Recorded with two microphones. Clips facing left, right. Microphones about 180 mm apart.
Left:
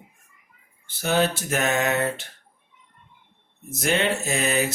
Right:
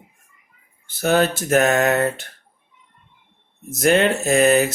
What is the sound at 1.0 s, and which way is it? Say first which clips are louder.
Speech: right 4 dB; 50° right (ahead or behind).